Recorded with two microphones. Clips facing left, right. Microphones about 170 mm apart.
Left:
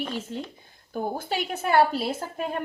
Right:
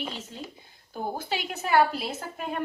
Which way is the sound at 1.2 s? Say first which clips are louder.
Left 3 dB; 50° left (ahead or behind).